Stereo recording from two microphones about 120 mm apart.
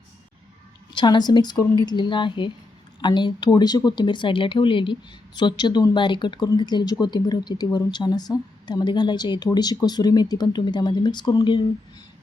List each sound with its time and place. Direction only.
0.9 s speech: 35° left (ahead or behind)